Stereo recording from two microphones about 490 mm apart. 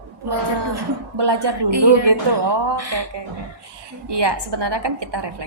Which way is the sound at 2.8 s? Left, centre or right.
Right.